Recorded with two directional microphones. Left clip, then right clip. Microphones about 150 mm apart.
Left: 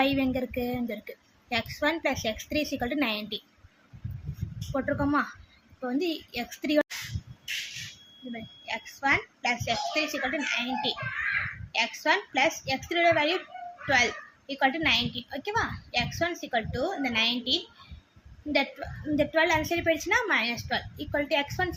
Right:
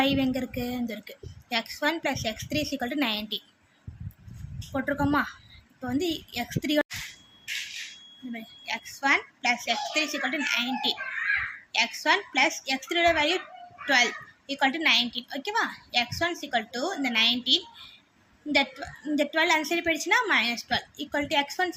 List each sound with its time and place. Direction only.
0.0 s a woman's voice: 5° right (ahead or behind)
4.7 s a child's voice: 10° right (ahead or behind)
8.3 s a child's voice: 15° right (ahead or behind)